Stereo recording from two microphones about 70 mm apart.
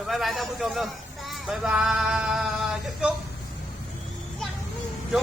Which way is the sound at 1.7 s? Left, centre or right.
Centre.